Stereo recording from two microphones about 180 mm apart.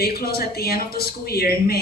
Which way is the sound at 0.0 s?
60° left (ahead or behind).